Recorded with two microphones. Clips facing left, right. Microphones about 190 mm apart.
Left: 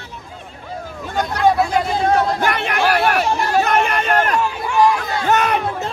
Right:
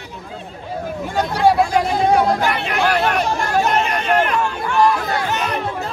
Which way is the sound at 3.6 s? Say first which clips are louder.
Left 1 dB; 55° left (ahead or behind).